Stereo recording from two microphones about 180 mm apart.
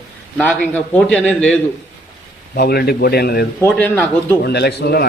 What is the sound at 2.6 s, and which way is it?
Speech, 60° left (ahead or behind).